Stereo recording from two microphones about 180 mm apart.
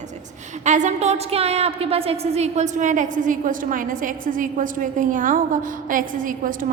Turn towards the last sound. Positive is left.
turn(degrees=-50)  # may be behind; listen again after turning